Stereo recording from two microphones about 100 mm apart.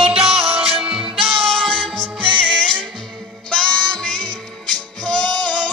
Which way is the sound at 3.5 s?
5° left (ahead or behind).